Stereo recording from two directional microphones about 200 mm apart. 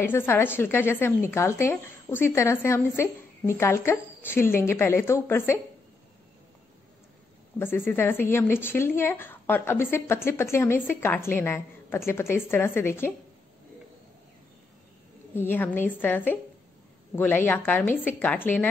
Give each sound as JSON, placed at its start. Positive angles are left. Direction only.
{"t": 0.0, "sound": "a woman's voice", "side_deg": 10}
{"t": 7.5, "sound": "a woman's voice", "side_deg": 10}
{"t": 15.3, "sound": "a woman's voice", "side_deg": 10}